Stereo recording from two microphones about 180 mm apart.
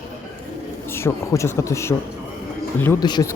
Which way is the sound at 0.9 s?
15° left (ahead or behind).